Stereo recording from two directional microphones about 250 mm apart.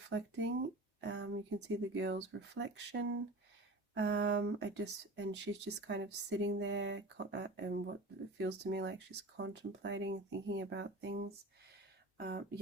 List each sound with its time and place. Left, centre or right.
0.1 s speech: right